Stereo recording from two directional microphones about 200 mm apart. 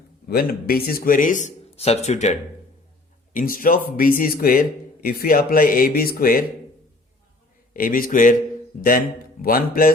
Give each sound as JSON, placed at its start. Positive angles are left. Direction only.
{"t": 0.3, "sound": "speech", "side_deg": 45}
{"t": 3.3, "sound": "speech", "side_deg": 45}
{"t": 7.7, "sound": "speech", "side_deg": 45}